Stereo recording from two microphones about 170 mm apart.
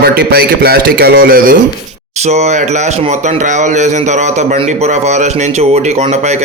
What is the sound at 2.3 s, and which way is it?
Speech, 40° right (ahead or behind).